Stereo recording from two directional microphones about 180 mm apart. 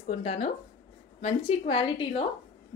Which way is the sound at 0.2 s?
40° left (ahead or behind).